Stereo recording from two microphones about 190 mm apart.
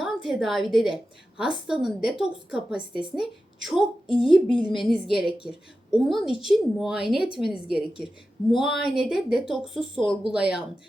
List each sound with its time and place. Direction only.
0.0 s a woman's voice: centre (ahead or behind)
4.3 s speech: 25° left (ahead or behind)
4.6 s speech: 5° right (ahead or behind)